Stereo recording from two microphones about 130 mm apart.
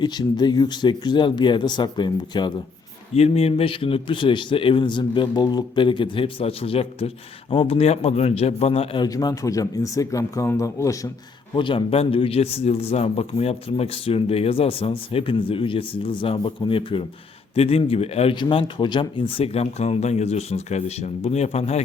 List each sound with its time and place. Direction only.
0.0 s a man's voice: 35° left (ahead or behind)
3.2 s a man's voice: 50° left (ahead or behind)
9.0 s speech: 30° left (ahead or behind)
11.5 s speech: 40° left (ahead or behind)
18.3 s speech: 40° left (ahead or behind); by 21.8 s 55° left (ahead or behind)